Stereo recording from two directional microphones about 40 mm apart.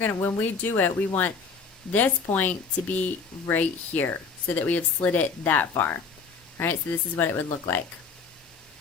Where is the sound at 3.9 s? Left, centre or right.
Left.